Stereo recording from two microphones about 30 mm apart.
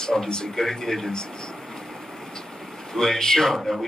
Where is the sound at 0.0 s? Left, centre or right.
Centre.